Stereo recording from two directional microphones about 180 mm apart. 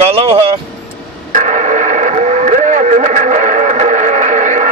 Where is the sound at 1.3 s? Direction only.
40° right (ahead or behind).